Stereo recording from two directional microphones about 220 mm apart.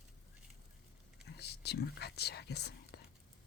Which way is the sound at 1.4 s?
50° left (ahead or behind).